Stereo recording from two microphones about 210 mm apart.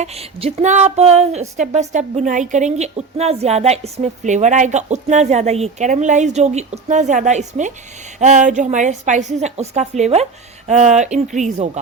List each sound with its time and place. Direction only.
0.0 s speech: 30° right (ahead or behind)